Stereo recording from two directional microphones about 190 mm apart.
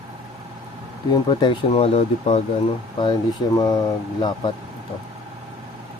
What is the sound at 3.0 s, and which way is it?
Speech, 20° left (ahead or behind).